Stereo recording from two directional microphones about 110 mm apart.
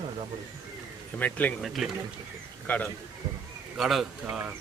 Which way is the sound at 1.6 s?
Centre (ahead or behind).